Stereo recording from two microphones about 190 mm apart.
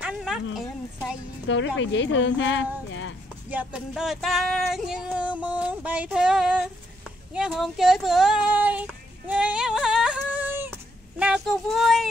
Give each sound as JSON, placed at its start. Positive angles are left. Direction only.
{"t": 0.0, "sound": "a sound", "side_deg": -5}
{"t": 1.8, "sound": "a woman's voice", "side_deg": 75}
{"t": 3.4, "sound": "female singing", "side_deg": -5}